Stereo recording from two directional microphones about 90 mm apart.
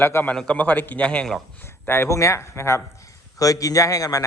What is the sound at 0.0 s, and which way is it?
Speech, 25° left (ahead or behind).